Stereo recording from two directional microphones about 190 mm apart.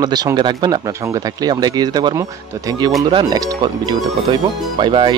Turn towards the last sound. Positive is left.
turn(degrees=-25)  # may be behind; listen again after turning